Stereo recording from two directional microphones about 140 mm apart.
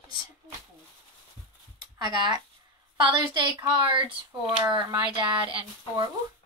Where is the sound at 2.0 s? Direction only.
30° right (ahead or behind).